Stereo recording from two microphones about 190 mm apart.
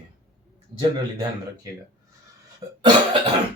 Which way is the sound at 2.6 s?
20° right (ahead or behind).